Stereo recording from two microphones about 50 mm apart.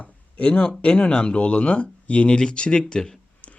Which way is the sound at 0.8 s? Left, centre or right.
Left.